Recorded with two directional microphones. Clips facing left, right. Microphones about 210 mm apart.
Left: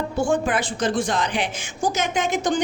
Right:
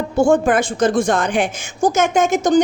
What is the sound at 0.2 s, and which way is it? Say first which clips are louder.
A woman's voice: right 8 dB; 45° right (ahead or behind).